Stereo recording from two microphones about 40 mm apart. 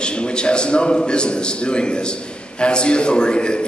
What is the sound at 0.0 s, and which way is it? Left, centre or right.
A man's voice, left.